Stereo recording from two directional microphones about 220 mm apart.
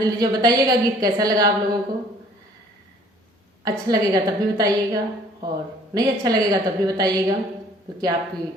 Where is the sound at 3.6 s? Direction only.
15° right (ahead or behind).